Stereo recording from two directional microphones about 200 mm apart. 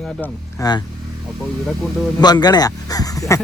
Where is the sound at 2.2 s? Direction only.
20° left (ahead or behind).